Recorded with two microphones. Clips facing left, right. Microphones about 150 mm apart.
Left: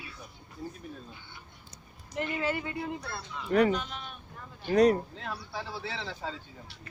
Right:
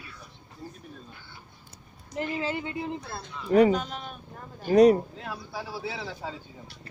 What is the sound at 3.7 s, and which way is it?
Speech, 40° right (ahead or behind).